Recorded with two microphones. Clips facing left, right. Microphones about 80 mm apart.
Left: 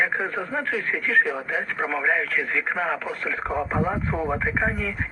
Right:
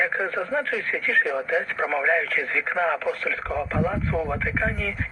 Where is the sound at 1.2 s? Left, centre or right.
Centre.